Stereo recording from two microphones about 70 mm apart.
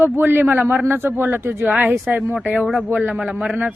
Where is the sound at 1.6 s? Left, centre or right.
Right.